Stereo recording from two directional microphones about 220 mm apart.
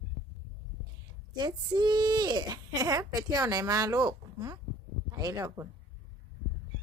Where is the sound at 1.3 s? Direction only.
20° right (ahead or behind).